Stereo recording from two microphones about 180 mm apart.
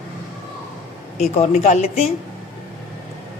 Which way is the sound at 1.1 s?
40° left (ahead or behind).